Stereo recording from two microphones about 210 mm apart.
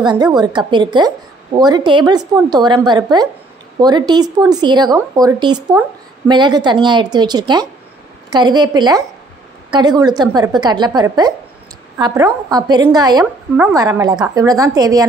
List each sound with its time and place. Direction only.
0.0 s a woman's voice: 20° right (ahead or behind)